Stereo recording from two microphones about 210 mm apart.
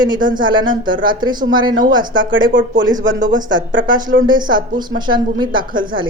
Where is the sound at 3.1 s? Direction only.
40° right (ahead or behind).